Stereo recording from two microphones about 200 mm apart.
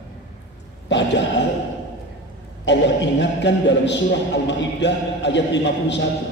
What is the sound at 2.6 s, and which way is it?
A man's voice, 65° left (ahead or behind).